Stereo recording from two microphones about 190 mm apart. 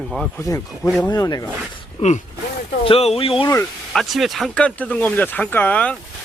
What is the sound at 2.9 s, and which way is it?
Speech, 30° left (ahead or behind).